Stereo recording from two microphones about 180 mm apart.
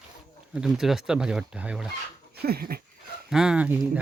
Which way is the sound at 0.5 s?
5° right (ahead or behind).